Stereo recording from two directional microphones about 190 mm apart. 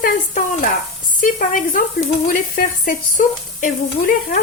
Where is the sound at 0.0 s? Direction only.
45° left (ahead or behind).